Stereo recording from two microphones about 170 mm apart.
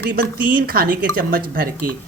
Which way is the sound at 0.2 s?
60° right (ahead or behind).